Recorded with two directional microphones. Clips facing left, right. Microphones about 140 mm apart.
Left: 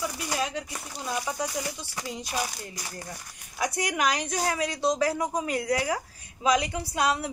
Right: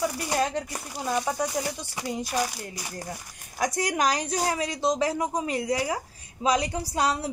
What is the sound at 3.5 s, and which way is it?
A woman's voice, 45° right (ahead or behind).